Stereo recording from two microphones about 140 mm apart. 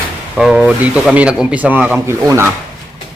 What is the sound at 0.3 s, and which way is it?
Speech, 5° right (ahead or behind).